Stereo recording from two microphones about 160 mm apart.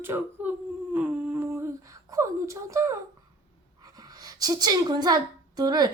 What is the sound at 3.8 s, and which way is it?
Speech, 25° right (ahead or behind).